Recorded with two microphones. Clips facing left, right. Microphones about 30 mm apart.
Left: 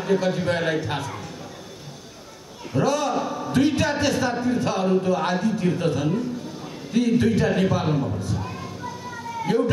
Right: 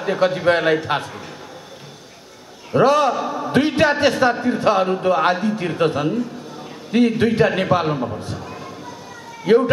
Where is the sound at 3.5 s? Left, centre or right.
Right.